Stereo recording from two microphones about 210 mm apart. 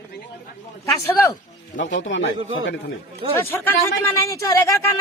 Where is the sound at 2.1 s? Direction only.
60° left (ahead or behind).